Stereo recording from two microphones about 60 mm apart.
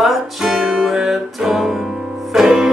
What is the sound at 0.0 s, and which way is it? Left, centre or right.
Music, centre.